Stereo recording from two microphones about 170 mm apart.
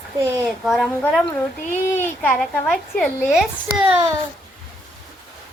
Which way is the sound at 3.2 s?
5° right (ahead or behind).